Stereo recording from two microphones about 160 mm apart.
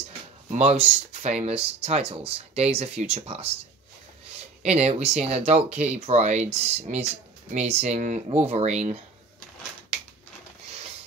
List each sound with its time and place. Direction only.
0.5 s speech: 40° right (ahead or behind)
4.6 s speech: 40° right (ahead or behind)